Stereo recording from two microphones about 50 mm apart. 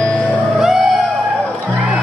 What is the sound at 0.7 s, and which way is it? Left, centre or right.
Music, right.